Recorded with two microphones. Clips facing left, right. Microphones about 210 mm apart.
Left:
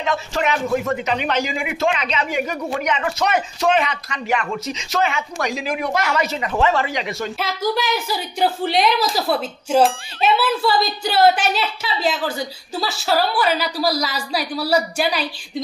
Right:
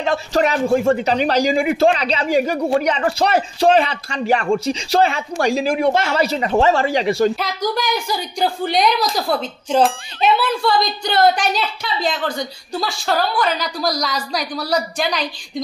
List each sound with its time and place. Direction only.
0.0 s speech: 35° right (ahead or behind)
7.3 s speech: 5° left (ahead or behind)